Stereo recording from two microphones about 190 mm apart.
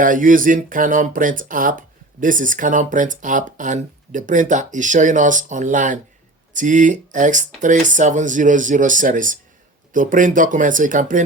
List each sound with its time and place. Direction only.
0.0 s speech: 45° right (ahead or behind)